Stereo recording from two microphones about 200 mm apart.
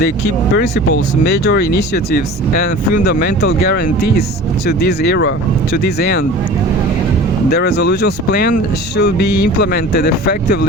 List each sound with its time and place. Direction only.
1.2 s speech: 50° left (ahead or behind)
7.5 s speech: 55° left (ahead or behind)